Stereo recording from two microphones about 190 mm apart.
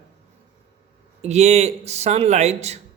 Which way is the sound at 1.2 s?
35° right (ahead or behind).